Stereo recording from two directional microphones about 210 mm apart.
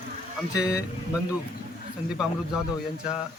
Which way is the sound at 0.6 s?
5° right (ahead or behind).